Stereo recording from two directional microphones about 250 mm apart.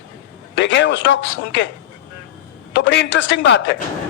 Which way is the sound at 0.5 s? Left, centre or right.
Left.